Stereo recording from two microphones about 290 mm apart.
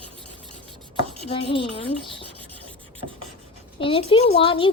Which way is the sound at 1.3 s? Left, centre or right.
Centre.